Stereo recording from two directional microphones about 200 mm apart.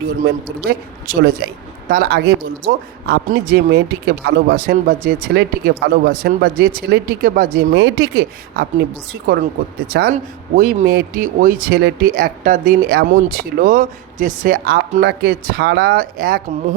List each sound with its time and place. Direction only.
0.6 s speech: 50° right (ahead or behind)
7.7 s speech: 60° right (ahead or behind); by 16.4 s 45° right (ahead or behind)